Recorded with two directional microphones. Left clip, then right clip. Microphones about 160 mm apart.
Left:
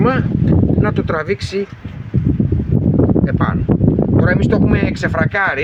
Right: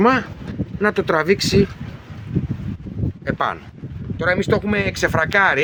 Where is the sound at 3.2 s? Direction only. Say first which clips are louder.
Left 2 dB; 40° right (ahead or behind).